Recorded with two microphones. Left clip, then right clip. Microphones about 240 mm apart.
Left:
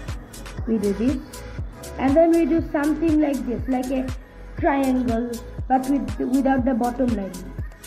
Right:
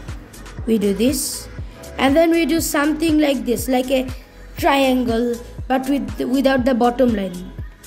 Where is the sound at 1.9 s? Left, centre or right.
Right.